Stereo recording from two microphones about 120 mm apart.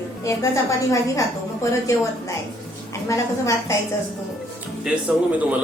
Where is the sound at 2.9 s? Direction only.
25° left (ahead or behind).